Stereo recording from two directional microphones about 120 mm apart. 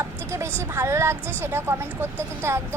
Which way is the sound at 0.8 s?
20° right (ahead or behind).